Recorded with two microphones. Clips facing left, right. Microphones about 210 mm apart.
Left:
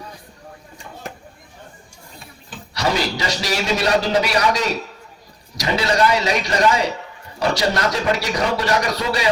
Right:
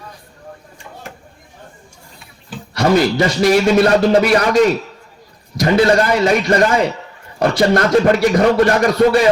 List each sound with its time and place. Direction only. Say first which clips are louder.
2.7 s a man's voice: right 8 dB; 55° right (ahead or behind)